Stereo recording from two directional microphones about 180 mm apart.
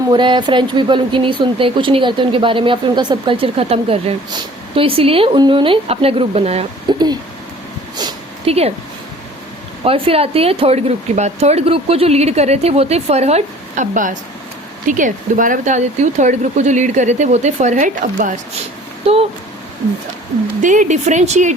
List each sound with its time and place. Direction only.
0.1 s speech: 25° right (ahead or behind)
6.9 s speech: 25° right (ahead or behind)
8.4 s speech: 35° right (ahead or behind)
9.8 s speech: 30° right (ahead or behind)
19.0 s speech: 35° right (ahead or behind)
20.6 s speech: 45° right (ahead or behind)